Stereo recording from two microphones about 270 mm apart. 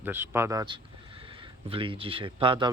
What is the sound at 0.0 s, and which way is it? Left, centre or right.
Speech, centre.